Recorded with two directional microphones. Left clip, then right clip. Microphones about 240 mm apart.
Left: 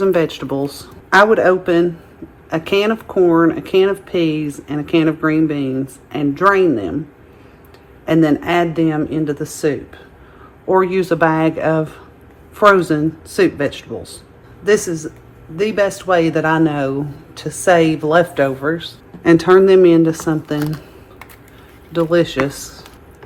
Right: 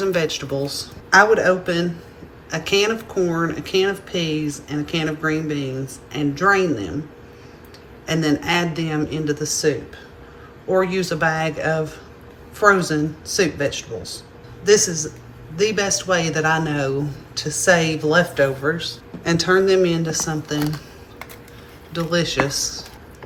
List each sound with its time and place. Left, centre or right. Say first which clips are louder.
0.0 s speech: left 5 dB; centre
8.0 s speech: left 6 dB; left
21.9 s speech: left 6 dB; centre